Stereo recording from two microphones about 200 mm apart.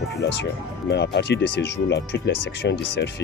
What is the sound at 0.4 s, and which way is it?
Speech, 55° left (ahead or behind).